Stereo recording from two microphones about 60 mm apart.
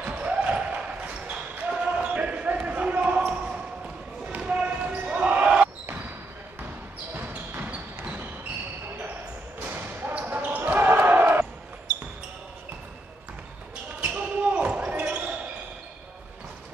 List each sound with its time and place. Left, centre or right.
0.0 s basketball bounce: right
7.2 s basketball bounce: right
9.7 s basketball bounce: right
14.0 s basketball bounce: right